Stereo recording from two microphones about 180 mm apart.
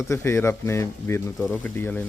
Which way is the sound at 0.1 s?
15° left (ahead or behind).